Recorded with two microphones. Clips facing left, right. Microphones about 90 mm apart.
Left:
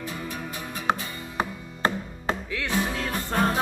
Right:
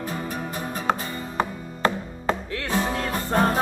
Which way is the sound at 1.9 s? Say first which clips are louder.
Right 3 dB; 40° right (ahead or behind).